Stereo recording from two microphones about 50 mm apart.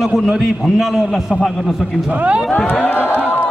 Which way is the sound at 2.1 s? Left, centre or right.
Right.